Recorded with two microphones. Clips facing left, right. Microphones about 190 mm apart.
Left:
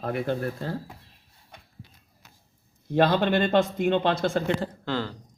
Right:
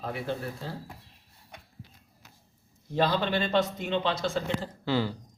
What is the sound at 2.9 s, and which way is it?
A man's voice, 60° left (ahead or behind).